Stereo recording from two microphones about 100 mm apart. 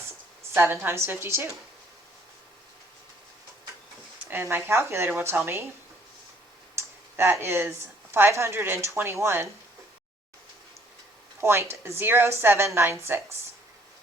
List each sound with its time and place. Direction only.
0.5 s a woman's voice: 25° right (ahead or behind)
4.3 s a woman's voice: 20° right (ahead or behind)
6.7 s a sound: 25° right (ahead or behind)
8.1 s a woman's voice: 25° right (ahead or behind)
11.3 s a woman's voice: 25° right (ahead or behind)